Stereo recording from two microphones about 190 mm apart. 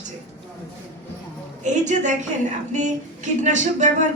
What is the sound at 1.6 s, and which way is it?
Speech, 40° right (ahead or behind).